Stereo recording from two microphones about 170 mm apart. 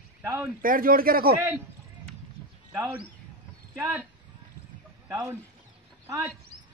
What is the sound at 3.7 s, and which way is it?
Speech, 10° right (ahead or behind).